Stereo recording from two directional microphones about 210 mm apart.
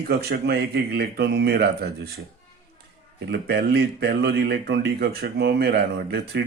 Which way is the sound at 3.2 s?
55° right (ahead or behind).